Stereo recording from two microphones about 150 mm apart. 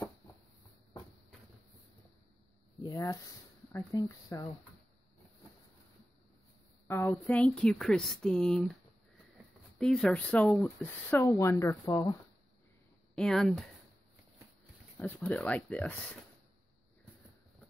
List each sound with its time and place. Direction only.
2.8 s speech: 25° left (ahead or behind)
6.9 s speech: 15° left (ahead or behind)
9.8 s speech: 5° left (ahead or behind); by 12.2 s 25° left (ahead or behind)
13.1 s speech: 5° left (ahead or behind)
15.0 s speech: 10° left (ahead or behind)